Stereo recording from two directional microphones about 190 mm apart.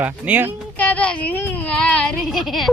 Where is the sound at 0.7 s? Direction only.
10° left (ahead or behind).